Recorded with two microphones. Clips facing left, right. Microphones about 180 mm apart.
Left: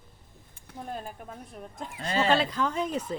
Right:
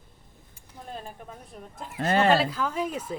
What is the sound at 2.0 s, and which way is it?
Speech, 55° right (ahead or behind).